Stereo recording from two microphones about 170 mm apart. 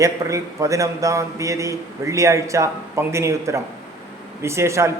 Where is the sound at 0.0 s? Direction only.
20° right (ahead or behind).